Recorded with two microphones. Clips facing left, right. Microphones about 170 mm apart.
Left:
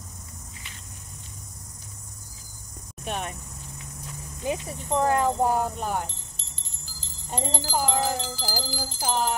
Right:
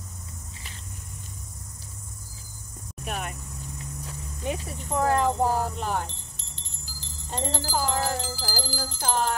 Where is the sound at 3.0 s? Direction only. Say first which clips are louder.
Left 2 dB; 30° left (ahead or behind).